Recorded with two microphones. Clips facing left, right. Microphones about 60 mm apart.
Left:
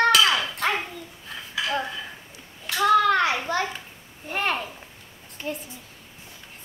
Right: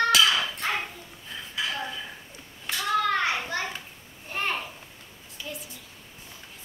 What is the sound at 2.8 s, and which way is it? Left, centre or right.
Hands, left.